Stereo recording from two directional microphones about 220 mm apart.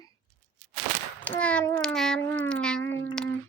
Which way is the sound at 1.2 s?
5° left (ahead or behind).